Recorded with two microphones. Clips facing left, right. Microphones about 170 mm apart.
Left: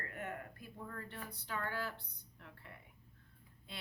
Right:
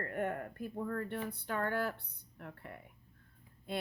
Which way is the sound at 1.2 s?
55° right (ahead or behind).